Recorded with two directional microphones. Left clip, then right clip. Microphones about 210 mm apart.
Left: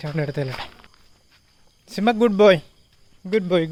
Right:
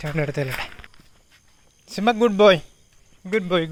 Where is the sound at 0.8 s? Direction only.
55° right (ahead or behind).